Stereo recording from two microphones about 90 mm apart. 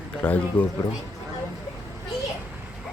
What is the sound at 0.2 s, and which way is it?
Speech, 15° left (ahead or behind).